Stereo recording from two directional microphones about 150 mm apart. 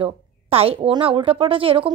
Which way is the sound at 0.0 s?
40° right (ahead or behind).